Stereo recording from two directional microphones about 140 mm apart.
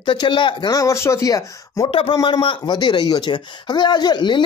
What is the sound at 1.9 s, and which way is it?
Speech, 40° left (ahead or behind).